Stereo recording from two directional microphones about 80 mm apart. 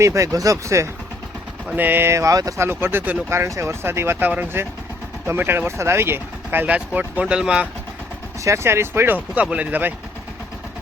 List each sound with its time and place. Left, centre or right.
0.0 s speech: right
1.7 s speech: right
2.1 s speech: right
2.6 s speech: right; by 7.7 s centre
8.4 s speech: right
9.3 s speech: centre